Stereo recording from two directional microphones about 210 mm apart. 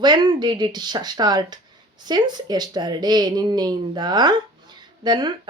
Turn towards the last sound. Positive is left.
turn(degrees=-20)  # may be behind; listen again after turning